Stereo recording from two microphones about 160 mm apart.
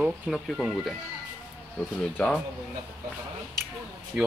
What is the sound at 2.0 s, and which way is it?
Speech, 5° left (ahead or behind).